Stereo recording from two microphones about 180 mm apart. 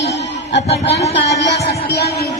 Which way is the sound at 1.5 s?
65° left (ahead or behind).